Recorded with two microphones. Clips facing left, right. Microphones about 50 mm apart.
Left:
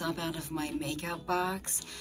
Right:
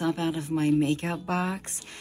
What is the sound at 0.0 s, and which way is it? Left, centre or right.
Speech, right.